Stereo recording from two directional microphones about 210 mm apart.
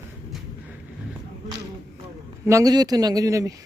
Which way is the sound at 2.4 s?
15° right (ahead or behind).